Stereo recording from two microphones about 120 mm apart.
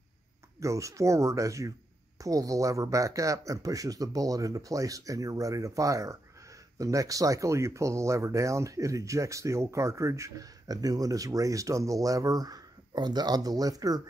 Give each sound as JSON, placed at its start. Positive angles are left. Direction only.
{"t": 0.6, "sound": "speech", "side_deg": -25}